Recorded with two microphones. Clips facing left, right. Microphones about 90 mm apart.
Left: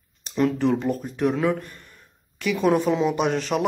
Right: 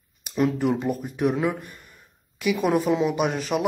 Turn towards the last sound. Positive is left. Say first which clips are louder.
# left 1 dB
turn(degrees=-5)  # may be behind; listen again after turning